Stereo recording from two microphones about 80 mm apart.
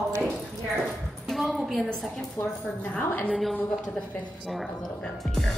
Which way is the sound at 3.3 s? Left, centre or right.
Centre.